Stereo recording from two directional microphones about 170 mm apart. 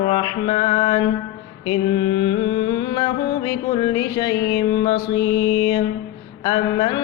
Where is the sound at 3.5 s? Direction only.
25° left (ahead or behind).